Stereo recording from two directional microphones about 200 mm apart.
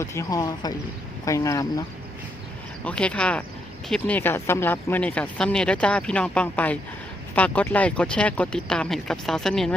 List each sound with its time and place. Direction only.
0.0 s speech: 15° left (ahead or behind)
2.8 s speech: 5° left (ahead or behind)